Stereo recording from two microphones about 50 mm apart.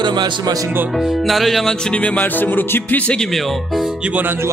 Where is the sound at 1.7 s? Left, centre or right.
Centre.